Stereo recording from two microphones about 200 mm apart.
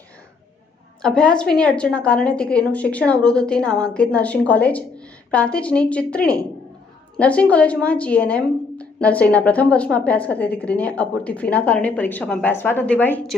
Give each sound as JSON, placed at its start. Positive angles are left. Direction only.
{"t": 1.0, "sound": "a woman's voice", "side_deg": 5}